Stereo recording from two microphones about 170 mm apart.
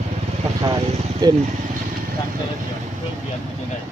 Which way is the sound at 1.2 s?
25° right (ahead or behind).